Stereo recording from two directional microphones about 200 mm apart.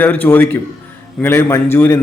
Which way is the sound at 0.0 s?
10° left (ahead or behind).